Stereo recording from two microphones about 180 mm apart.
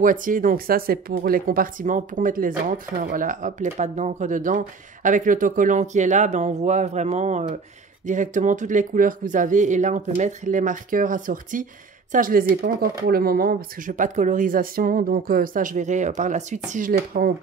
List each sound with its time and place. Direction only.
0.0 s speech: 50° right (ahead or behind)